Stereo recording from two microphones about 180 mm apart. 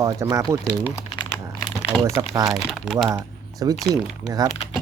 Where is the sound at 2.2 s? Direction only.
20° right (ahead or behind).